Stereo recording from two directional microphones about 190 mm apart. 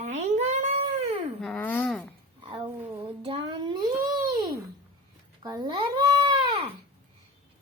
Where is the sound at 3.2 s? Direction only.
30° right (ahead or behind).